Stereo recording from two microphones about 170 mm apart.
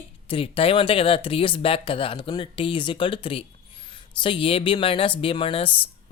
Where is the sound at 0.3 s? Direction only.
35° left (ahead or behind).